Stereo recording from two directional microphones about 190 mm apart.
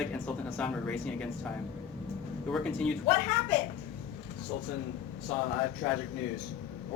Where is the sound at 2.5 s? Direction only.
5° left (ahead or behind).